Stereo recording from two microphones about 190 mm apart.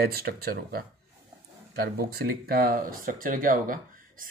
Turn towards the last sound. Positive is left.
turn(degrees=-45)  # may be behind; listen again after turning